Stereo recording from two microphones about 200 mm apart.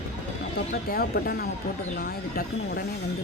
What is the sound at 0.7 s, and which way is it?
Speech, 45° left (ahead or behind).